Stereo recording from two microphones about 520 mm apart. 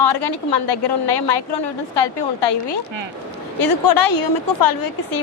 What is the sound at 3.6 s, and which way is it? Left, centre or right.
A woman's voice, left.